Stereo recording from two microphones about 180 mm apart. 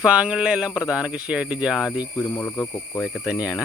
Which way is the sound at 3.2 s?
5° right (ahead or behind).